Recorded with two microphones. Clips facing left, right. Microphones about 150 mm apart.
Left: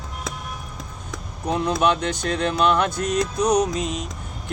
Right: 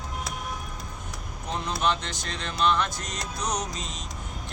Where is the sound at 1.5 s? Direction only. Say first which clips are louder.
Left 7 dB; 60° left (ahead or behind).